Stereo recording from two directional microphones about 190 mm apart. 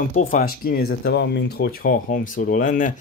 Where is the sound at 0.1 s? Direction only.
40° left (ahead or behind).